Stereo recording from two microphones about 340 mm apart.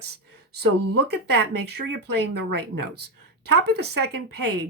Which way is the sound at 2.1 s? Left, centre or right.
Right.